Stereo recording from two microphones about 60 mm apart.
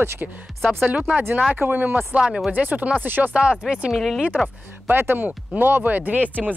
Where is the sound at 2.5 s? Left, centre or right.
Right.